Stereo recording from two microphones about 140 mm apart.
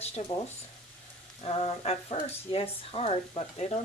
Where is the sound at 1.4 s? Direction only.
45° left (ahead or behind).